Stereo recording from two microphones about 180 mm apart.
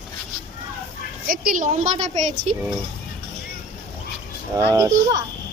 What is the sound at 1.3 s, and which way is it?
A woman's voice, 50° right (ahead or behind).